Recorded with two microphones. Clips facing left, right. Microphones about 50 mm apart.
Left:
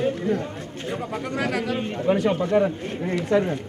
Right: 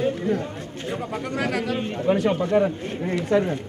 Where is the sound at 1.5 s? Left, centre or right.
Centre.